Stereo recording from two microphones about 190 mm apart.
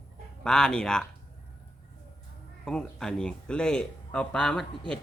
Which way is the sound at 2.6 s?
5° left (ahead or behind).